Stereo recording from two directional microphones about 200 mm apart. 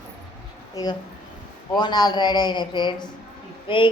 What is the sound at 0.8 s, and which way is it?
A man's voice, 15° left (ahead or behind).